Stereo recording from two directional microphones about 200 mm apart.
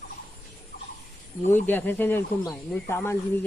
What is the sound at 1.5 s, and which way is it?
Speech, 10° left (ahead or behind).